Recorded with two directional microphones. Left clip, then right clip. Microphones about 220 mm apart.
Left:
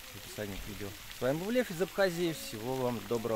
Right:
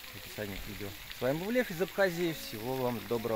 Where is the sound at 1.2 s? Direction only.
Centre (ahead or behind).